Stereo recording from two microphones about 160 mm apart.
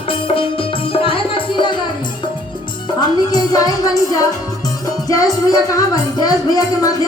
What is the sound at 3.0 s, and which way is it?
Music, 25° left (ahead or behind).